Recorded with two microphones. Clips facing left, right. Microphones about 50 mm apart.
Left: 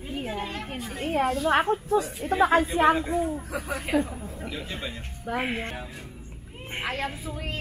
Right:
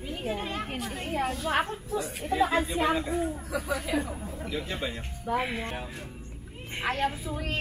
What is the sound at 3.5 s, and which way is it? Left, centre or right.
Speech, left.